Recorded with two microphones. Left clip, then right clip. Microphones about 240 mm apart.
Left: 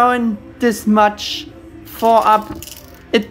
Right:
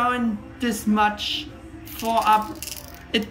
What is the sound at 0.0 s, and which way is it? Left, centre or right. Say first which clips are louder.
A woman's voice: left 9 dB; centre.